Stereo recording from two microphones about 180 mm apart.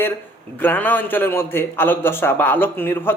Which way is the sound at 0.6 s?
10° left (ahead or behind).